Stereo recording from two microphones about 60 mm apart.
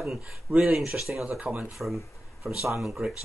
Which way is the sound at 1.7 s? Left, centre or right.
Centre.